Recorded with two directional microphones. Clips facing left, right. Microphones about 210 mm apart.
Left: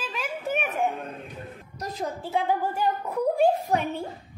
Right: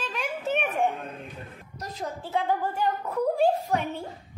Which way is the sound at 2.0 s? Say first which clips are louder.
Left 1 dB; 10° left (ahead or behind).